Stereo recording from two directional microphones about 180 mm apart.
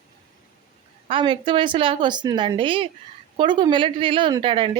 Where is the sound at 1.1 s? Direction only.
25° right (ahead or behind).